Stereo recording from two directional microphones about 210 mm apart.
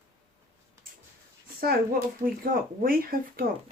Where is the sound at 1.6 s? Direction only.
45° right (ahead or behind).